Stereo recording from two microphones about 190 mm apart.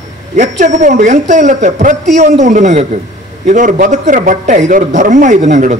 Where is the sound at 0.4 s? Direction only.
40° right (ahead or behind).